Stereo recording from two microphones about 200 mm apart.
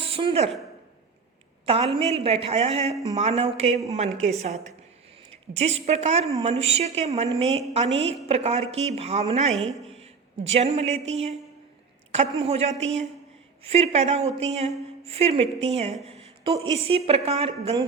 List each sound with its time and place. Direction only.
0.0 s speech: 25° right (ahead or behind)
1.6 s speech: 30° right (ahead or behind)
12.4 s a woman's voice: 30° right (ahead or behind)